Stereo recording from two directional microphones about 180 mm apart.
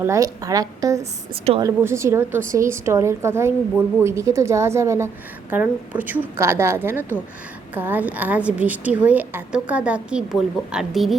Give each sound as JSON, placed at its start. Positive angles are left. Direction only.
{"t": 0.0, "sound": "a woman's voice", "side_deg": -15}